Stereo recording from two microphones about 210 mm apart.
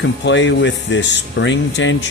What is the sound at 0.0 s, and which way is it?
Speech, 60° left (ahead or behind).